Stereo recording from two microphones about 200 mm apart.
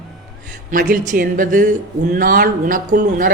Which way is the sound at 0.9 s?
40° right (ahead or behind).